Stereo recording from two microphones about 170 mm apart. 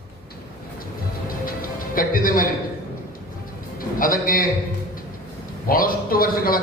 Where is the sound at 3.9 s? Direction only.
55° left (ahead or behind).